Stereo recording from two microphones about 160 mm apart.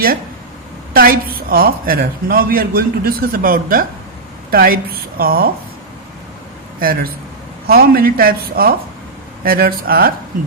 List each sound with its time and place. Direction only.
0.9 s a woman's voice: 65° right (ahead or behind)
6.7 s speech: 70° right (ahead or behind)